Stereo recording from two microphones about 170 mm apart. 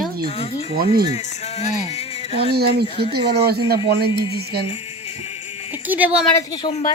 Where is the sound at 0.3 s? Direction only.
35° left (ahead or behind).